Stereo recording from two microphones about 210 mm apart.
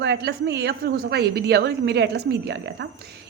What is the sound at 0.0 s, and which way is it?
A woman's voice, 55° right (ahead or behind).